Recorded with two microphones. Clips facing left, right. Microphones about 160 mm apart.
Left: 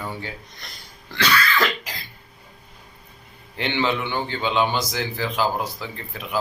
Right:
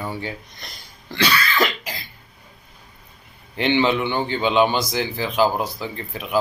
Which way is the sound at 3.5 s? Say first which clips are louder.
Right 5 dB; 15° right (ahead or behind).